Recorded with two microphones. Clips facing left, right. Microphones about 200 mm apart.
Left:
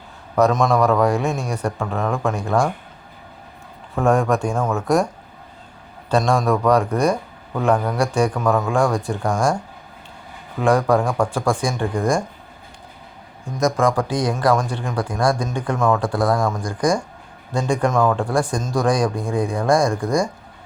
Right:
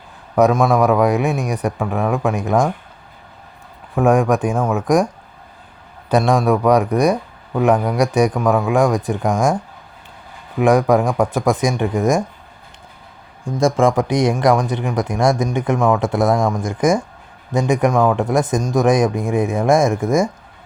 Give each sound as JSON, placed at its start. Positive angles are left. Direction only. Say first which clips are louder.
{"t": 0.3, "sound": "a man's voice", "louder": "right 3 dB", "side_deg": -10}
{"t": 3.9, "sound": "a man's voice", "louder": "right 3 dB", "side_deg": -15}
{"t": 6.1, "sound": "a man's voice", "louder": "right 3 dB", "side_deg": -15}
{"t": 10.6, "sound": "speech", "louder": "right 3 dB", "side_deg": -15}
{"t": 13.4, "sound": "a man's voice", "louder": "right 3 dB", "side_deg": -30}